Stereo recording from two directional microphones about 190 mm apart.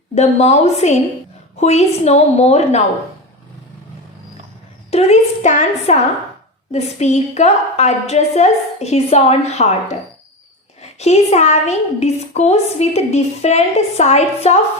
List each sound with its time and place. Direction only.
0.1 s a woman's voice: 35° left (ahead or behind)
4.9 s a woman's voice: 35° left (ahead or behind)
11.0 s a woman's voice: 35° left (ahead or behind)